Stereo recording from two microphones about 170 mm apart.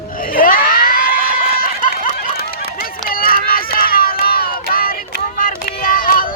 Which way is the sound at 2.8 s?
60° left (ahead or behind).